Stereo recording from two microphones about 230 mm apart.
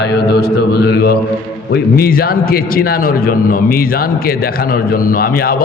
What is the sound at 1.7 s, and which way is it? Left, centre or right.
A man's voice, left.